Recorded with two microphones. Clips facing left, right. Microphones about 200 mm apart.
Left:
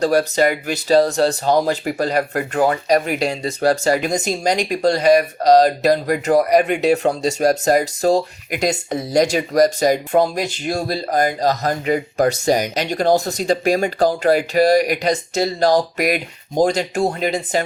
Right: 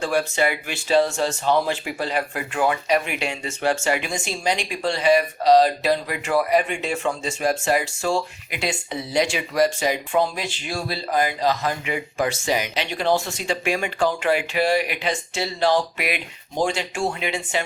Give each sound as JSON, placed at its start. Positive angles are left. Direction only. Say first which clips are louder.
{"t": 0.0, "sound": "speech", "louder": "left 6 dB", "side_deg": 40}